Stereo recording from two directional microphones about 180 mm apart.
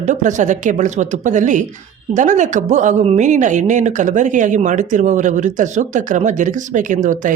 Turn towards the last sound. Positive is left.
turn(degrees=-45)  # may be behind; listen again after turning